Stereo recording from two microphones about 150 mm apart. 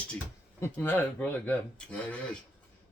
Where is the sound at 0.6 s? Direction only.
15° left (ahead or behind).